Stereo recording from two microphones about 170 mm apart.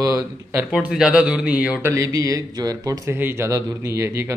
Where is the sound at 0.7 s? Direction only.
5° right (ahead or behind).